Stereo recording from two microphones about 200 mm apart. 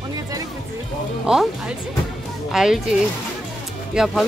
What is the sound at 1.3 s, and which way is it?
Speech, 5° right (ahead or behind).